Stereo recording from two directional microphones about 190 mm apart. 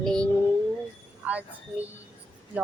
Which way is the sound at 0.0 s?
5° left (ahead or behind).